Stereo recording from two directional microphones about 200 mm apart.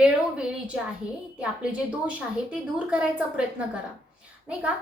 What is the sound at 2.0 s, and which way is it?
A woman's voice, 5° right (ahead or behind).